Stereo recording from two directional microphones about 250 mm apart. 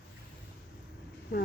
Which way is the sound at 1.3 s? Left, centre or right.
Left.